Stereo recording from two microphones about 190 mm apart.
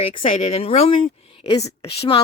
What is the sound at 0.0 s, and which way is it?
A woman's voice, 30° left (ahead or behind).